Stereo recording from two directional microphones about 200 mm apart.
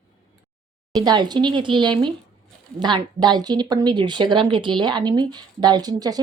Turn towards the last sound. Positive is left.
turn(degrees=-20)  # may be behind; listen again after turning